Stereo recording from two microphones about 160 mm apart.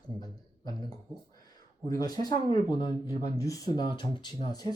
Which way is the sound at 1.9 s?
25° left (ahead or behind).